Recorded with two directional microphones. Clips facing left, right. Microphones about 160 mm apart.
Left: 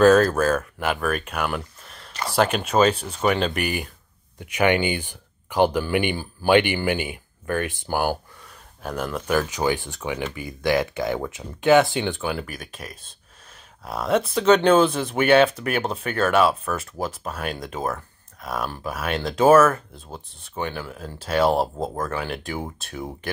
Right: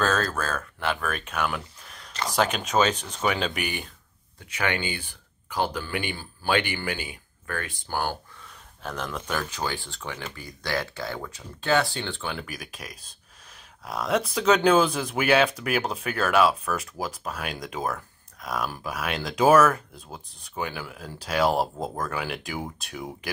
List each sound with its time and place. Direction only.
0.4 s speech: 10° left (ahead or behind)
4.4 s speech: 15° left (ahead or behind)
7.9 s speech: 10° left (ahead or behind)